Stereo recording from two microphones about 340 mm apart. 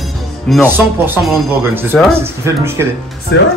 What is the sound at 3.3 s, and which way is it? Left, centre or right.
Speech, left.